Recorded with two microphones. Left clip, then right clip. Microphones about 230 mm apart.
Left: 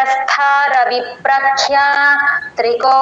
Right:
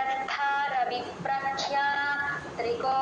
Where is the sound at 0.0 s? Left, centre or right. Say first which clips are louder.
Left 15 dB; left.